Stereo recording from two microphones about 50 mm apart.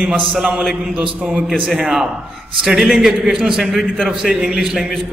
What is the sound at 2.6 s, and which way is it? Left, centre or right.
Mantra, centre.